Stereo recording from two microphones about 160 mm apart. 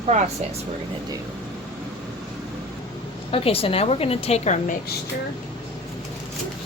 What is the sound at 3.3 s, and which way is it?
A woman's voice, 35° left (ahead or behind).